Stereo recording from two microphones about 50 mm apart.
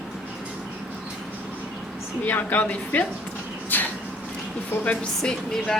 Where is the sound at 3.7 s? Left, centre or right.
Left.